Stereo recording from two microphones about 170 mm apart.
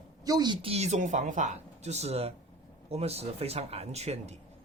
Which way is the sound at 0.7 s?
40° right (ahead or behind).